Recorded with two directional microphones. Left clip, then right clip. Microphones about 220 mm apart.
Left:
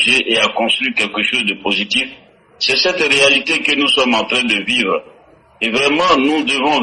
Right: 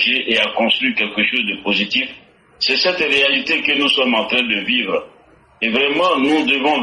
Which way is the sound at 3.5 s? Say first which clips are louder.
Left 2 dB; 50° left (ahead or behind).